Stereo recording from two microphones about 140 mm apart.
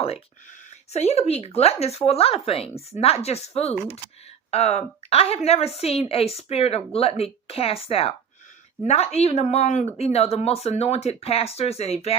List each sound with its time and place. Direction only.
0.9 s a woman's voice: 50° left (ahead or behind)
9.1 s a woman's voice: 50° left (ahead or behind)